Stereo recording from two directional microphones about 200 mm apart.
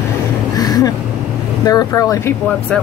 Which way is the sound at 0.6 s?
20° left (ahead or behind).